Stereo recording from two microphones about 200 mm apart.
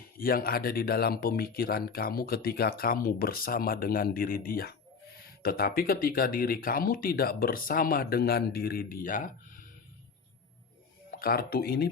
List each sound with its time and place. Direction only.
0.2 s speech: 45° left (ahead or behind)
11.1 s speech: 50° left (ahead or behind)